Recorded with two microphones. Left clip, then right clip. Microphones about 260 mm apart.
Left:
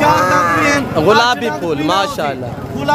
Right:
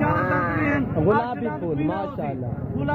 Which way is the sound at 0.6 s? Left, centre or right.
Centre.